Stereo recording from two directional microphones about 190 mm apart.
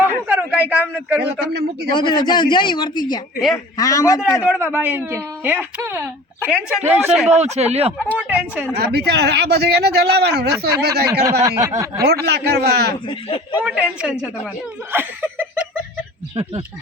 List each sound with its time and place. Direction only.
0.0 s a sound: 10° right (ahead or behind)
1.2 s speech: 60° right (ahead or behind)
2.0 s a man's voice: 25° left (ahead or behind)
4.4 s speech: 10° right (ahead or behind)
6.5 s speech: 5° right (ahead or behind)
7.3 s speech: 35° right (ahead or behind)
8.2 s speech: 5° right (ahead or behind)
8.8 s speech: 60° right (ahead or behind)
11.4 s speech: 15° right (ahead or behind)
12.2 s speech: 60° right (ahead or behind)
13.1 s a man's voice: 25° left (ahead or behind)
13.7 s speech: 5° right (ahead or behind)
14.9 s chuckle: 10° right (ahead or behind)
16.3 s speech: 25° right (ahead or behind)